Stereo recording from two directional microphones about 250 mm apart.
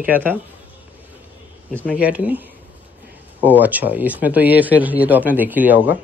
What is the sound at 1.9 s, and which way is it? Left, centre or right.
A man's voice, centre.